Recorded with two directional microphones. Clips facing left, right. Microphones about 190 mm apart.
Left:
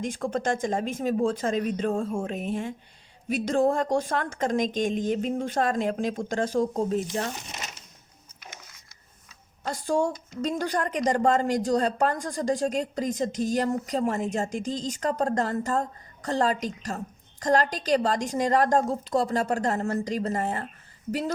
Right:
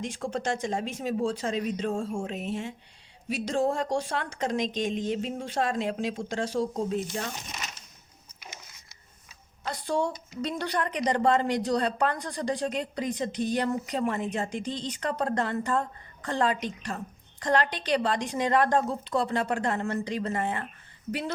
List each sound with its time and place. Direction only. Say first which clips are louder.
0.0 s a woman's voice: left 3 dB; 50° left (ahead or behind)
9.6 s a woman's voice: left 3 dB; 45° left (ahead or behind)